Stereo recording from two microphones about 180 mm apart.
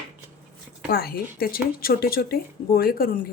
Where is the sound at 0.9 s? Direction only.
55° left (ahead or behind).